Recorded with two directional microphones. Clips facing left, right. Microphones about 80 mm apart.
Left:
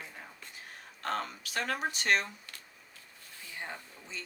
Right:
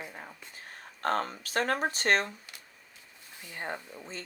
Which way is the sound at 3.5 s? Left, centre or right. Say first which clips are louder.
Right 5 dB; right.